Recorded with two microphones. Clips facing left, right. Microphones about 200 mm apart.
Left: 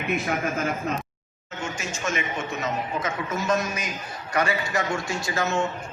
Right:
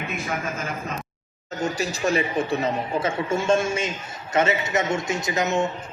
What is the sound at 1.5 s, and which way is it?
A man's voice, 35° right (ahead or behind).